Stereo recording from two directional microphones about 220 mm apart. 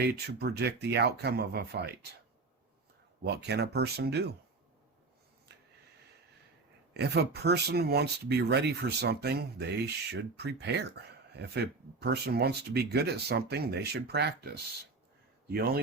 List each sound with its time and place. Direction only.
0.0 s speech: 45° right (ahead or behind)
3.2 s speech: 50° right (ahead or behind)
6.9 s speech: 50° right (ahead or behind)